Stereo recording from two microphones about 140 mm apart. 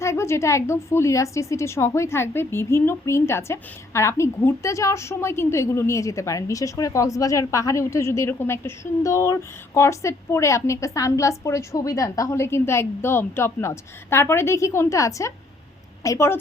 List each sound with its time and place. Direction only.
0.0 s a woman's voice: 20° left (ahead or behind)